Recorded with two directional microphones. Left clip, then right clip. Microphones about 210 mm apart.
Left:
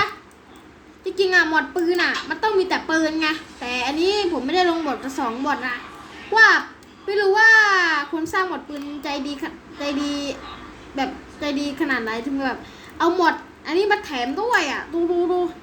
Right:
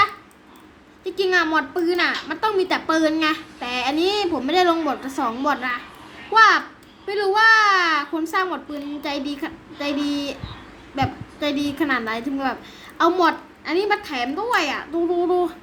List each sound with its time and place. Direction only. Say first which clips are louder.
1.0 s a woman's voice: left 2 dB; 10° right (ahead or behind)